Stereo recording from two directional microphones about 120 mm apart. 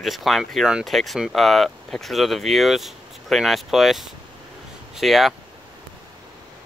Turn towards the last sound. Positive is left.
turn(degrees=0)  # may be behind; listen again after turning